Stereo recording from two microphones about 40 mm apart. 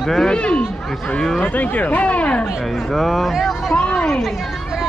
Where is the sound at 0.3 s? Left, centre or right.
Left.